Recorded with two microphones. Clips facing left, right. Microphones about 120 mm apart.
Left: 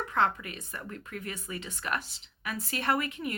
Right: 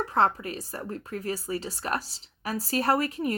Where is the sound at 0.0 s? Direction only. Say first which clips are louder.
Right 4 dB; 35° right (ahead or behind).